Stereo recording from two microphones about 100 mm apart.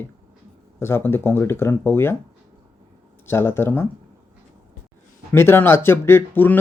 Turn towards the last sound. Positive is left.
turn(degrees=20)  # may be behind; listen again after turning